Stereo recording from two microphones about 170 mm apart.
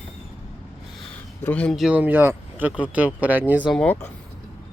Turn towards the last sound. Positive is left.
turn(degrees=5)  # may be behind; listen again after turning